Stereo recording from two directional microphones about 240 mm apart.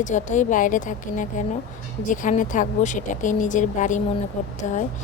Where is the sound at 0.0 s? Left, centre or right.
Left.